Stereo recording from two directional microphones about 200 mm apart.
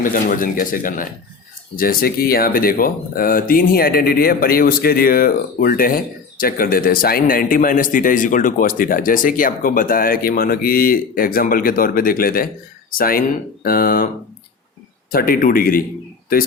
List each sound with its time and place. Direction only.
0.0 s a man's voice: 45° left (ahead or behind)
15.1 s a man's voice: 45° left (ahead or behind)